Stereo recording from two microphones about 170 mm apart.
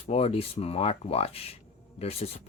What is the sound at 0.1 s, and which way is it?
Speech, 35° left (ahead or behind).